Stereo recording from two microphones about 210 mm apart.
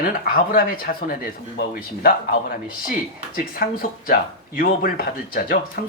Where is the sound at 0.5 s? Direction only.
45° left (ahead or behind).